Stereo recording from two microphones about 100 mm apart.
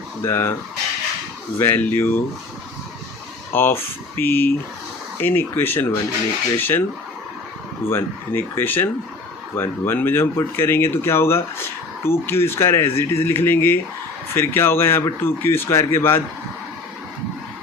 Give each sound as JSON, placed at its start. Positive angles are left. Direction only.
{"t": 0.2, "sound": "speech", "side_deg": 25}
{"t": 1.5, "sound": "speech", "side_deg": 20}
{"t": 3.5, "sound": "speech", "side_deg": 25}
{"t": 7.9, "sound": "speech", "side_deg": 25}